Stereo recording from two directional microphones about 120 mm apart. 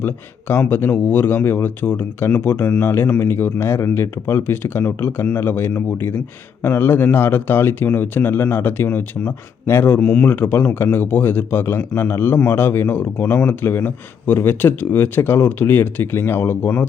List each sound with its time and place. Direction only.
0.0 s speech: 20° left (ahead or behind)
10.0 s speech: 10° left (ahead or behind)